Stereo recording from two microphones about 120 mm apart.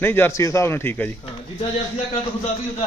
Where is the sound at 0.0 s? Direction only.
20° left (ahead or behind).